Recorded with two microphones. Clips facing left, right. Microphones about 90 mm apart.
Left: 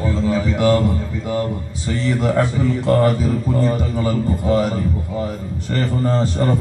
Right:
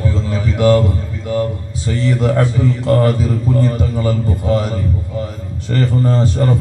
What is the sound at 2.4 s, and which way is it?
A man's voice, 15° left (ahead or behind).